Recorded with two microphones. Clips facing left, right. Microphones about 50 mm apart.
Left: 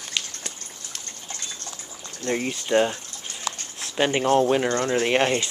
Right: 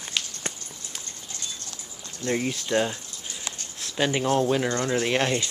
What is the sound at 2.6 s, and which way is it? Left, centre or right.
Speech, left.